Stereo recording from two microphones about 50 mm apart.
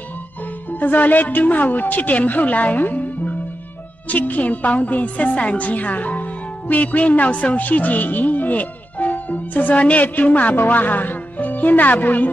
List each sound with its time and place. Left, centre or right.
0.7 s a woman's voice: left